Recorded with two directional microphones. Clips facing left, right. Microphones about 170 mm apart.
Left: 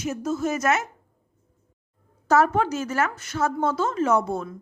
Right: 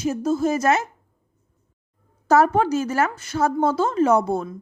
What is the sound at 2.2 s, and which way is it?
A woman's voice, 35° right (ahead or behind).